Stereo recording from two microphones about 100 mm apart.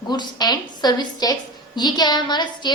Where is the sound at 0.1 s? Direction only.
45° left (ahead or behind).